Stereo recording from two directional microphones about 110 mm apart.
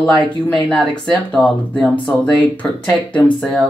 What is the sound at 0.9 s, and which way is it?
Speech, 5° left (ahead or behind).